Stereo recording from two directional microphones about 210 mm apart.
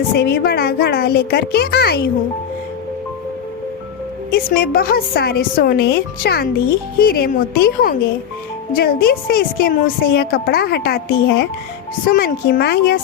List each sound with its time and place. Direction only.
0.1 s a woman's voice: 50° left (ahead or behind)
4.3 s a woman's voice: 45° left (ahead or behind)